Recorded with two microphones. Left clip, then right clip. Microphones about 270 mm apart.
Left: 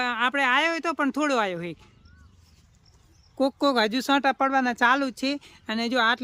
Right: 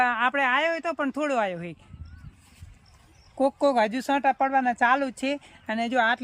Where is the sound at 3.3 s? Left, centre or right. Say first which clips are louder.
Right 1 dB; centre.